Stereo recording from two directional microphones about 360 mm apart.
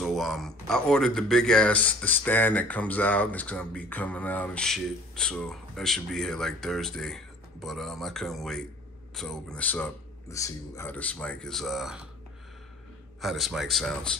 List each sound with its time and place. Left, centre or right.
0.0 s speech: centre
13.2 s speech: centre